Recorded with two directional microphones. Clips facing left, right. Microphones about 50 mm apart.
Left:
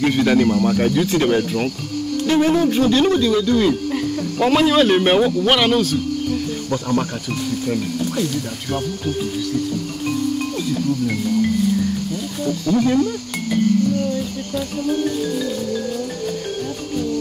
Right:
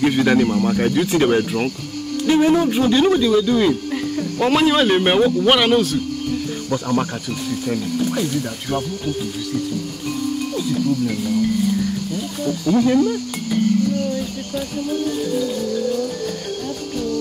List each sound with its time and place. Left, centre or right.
0.0 s speech: centre
8.1 s speech: centre
12.4 s speech: centre